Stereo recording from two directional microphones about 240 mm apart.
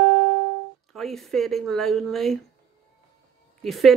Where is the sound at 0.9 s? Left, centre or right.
Centre.